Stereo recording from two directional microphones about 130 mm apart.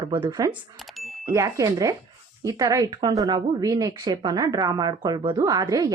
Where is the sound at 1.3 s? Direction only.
25° right (ahead or behind).